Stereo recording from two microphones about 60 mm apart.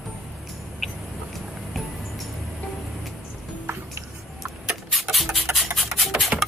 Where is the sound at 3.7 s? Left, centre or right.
Right.